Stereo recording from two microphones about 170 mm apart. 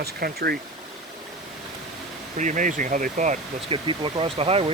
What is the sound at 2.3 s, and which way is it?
Speech, 50° right (ahead or behind).